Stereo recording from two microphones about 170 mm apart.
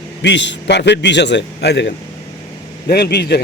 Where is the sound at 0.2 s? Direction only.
90° left.